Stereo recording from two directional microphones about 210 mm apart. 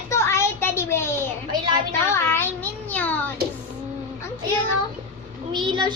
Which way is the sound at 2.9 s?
5° left (ahead or behind).